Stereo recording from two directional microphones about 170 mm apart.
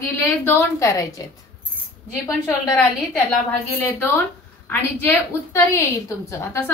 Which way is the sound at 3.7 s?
10° left (ahead or behind).